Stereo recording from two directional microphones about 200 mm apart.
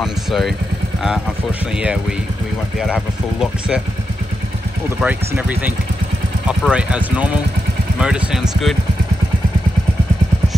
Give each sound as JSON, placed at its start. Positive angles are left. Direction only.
{"t": 0.0, "sound": "speech", "side_deg": 0}
{"t": 1.8, "sound": "speech", "side_deg": -5}
{"t": 5.0, "sound": "speech", "side_deg": -10}